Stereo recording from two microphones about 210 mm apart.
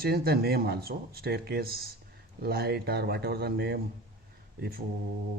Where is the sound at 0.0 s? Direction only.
50° right (ahead or behind).